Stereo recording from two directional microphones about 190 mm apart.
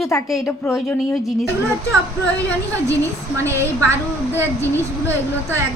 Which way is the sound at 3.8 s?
10° left (ahead or behind).